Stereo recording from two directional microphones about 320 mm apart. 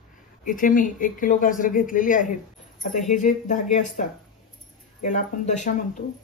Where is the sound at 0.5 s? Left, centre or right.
Left.